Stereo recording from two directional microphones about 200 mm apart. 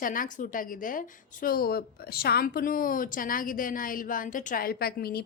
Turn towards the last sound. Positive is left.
turn(degrees=50)  # may be behind; listen again after turning